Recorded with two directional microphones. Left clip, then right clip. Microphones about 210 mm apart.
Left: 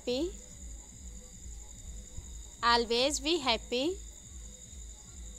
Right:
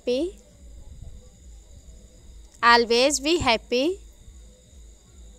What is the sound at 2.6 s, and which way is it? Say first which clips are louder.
Speech: right 10 dB; 35° right (ahead or behind).